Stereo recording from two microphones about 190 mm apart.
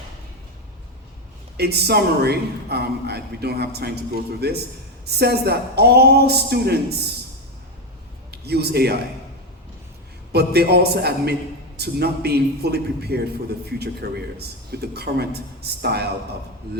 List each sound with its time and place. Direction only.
1.5 s a man's voice: 60° right (ahead or behind)
8.3 s a man's voice: 55° right (ahead or behind)
10.3 s a man's voice: 55° right (ahead or behind)